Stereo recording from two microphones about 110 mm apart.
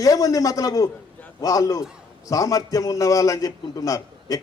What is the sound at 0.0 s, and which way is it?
A man's voice, 30° left (ahead or behind).